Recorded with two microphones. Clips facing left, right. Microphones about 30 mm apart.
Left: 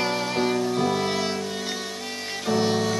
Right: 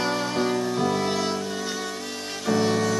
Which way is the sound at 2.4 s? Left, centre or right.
Centre.